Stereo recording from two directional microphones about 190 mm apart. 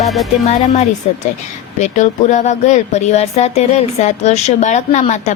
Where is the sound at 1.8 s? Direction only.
40° left (ahead or behind).